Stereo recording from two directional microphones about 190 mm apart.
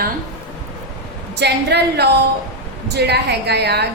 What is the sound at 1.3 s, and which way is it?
A woman's voice, 60° right (ahead or behind).